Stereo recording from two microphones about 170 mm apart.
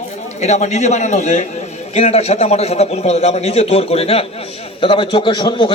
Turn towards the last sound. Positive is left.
turn(degrees=25)  # may be behind; listen again after turning